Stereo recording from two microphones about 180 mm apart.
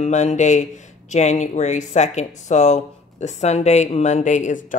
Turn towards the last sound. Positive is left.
turn(degrees=45)  # may be behind; listen again after turning